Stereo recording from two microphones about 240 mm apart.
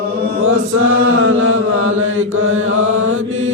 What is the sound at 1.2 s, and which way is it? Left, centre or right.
Mantra, right.